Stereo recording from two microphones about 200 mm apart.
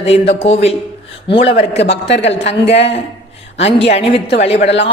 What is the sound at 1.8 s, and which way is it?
Speech, 60° left (ahead or behind).